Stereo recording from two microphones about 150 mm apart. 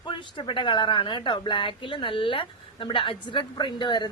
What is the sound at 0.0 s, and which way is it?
Speech, 35° left (ahead or behind).